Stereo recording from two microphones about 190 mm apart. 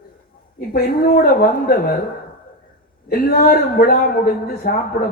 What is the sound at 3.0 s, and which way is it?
A man's voice, 50° left (ahead or behind).